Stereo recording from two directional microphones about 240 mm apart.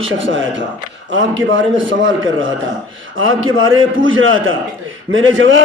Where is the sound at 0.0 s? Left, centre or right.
Right.